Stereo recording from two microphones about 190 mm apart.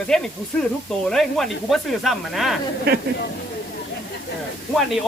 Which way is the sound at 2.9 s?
55° right (ahead or behind).